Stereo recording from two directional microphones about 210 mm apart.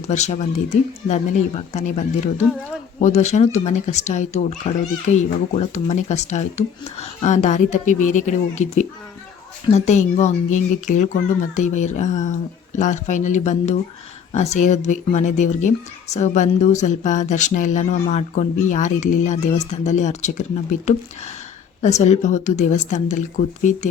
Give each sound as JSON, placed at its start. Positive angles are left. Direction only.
{"t": 0.1, "sound": "a woman's voice", "side_deg": 35}